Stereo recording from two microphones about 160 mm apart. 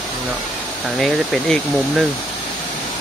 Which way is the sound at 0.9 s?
Centre (ahead or behind).